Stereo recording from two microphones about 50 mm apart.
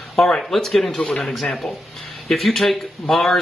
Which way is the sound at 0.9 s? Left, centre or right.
Left.